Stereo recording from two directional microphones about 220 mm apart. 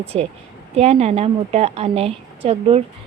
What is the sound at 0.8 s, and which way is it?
A woman's voice, 30° right (ahead or behind).